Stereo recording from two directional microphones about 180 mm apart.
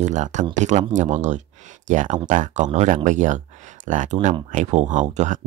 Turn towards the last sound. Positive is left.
turn(degrees=-40)  # may be behind; listen again after turning